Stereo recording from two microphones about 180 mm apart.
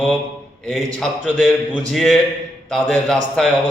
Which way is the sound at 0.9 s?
5° left (ahead or behind).